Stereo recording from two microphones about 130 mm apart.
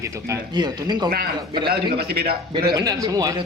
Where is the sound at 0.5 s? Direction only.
35° right (ahead or behind).